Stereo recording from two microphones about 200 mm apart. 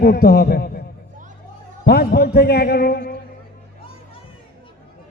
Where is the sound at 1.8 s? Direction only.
50° left (ahead or behind).